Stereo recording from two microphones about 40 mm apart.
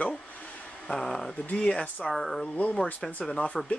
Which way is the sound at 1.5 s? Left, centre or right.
Left.